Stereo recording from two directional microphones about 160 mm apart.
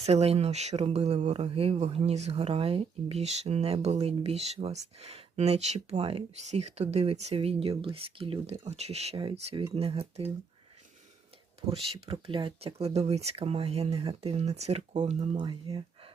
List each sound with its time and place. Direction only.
0.0 s speech: 40° right (ahead or behind)
11.7 s speech: 35° right (ahead or behind)
15.3 s speech: 30° right (ahead or behind)